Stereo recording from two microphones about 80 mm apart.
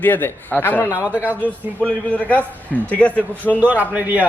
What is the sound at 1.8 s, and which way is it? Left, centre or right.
A man's voice, centre.